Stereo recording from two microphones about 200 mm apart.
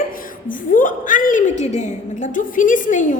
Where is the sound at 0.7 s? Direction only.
40° left (ahead or behind).